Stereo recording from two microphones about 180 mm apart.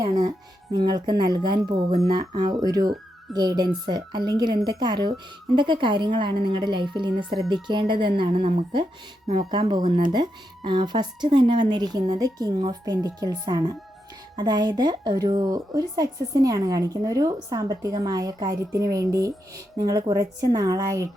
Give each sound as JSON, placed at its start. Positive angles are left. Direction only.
{"t": 0.0, "sound": "speech", "side_deg": -20}